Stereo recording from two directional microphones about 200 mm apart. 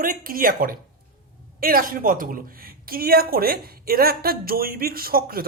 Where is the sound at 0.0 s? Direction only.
45° right (ahead or behind).